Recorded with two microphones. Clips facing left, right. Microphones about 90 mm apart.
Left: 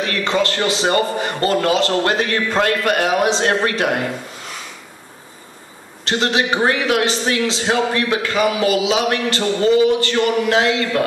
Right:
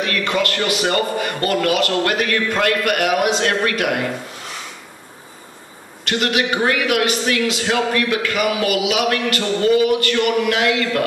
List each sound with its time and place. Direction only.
0.0 s a man's voice: 30° left (ahead or behind)
6.0 s a man's voice: 30° left (ahead or behind)